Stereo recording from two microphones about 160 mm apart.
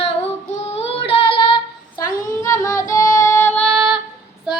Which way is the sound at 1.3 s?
30° left (ahead or behind).